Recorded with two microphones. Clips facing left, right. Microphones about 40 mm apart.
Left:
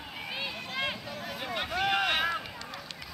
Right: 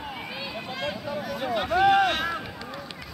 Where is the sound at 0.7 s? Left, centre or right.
Centre.